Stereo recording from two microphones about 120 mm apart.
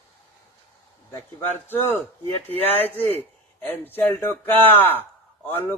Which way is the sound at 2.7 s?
55° right (ahead or behind).